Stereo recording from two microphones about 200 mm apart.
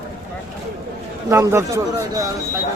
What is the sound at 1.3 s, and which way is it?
Speech, 15° right (ahead or behind).